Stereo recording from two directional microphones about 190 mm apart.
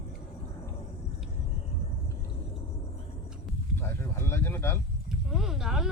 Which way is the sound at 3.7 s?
10° left (ahead or behind).